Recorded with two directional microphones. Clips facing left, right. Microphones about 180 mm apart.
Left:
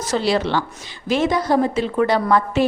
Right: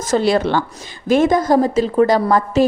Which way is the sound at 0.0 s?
50° right (ahead or behind).